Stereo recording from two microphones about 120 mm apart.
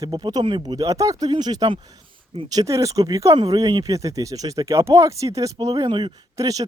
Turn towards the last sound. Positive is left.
turn(degrees=-30)  # may be behind; listen again after turning